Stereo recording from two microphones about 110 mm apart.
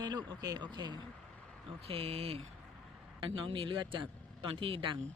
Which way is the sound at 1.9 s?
60° right (ahead or behind).